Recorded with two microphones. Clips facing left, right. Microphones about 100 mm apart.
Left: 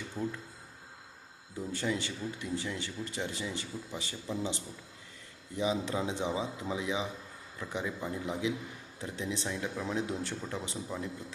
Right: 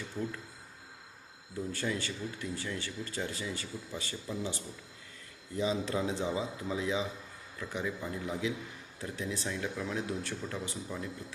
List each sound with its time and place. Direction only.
1.7 s speech: 20° left (ahead or behind)